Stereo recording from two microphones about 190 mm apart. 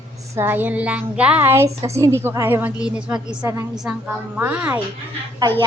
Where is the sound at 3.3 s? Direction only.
20° right (ahead or behind).